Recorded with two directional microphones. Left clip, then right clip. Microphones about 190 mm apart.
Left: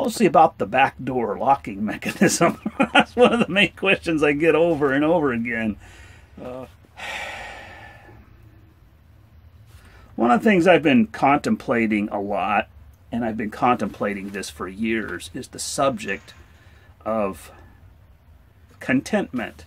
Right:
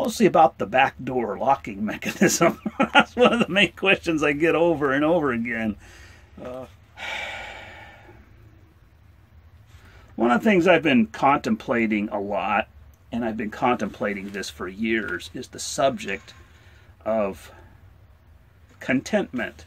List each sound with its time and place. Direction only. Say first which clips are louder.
0.0 s speech: left 1 dB; 5° left (ahead or behind)
10.1 s speech: left 2 dB; 10° left (ahead or behind)
18.8 s speech: left 1 dB; 5° left (ahead or behind)